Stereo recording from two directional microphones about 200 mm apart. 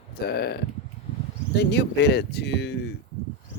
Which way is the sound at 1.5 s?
55° left (ahead or behind).